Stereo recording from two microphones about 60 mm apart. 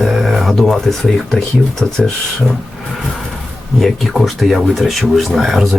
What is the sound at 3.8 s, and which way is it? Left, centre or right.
Speech, centre.